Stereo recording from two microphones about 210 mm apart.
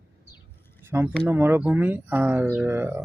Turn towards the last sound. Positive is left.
turn(degrees=-10)  # may be behind; listen again after turning